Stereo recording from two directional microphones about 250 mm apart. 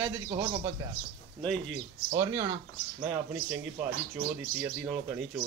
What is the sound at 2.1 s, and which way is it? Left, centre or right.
Speech, centre.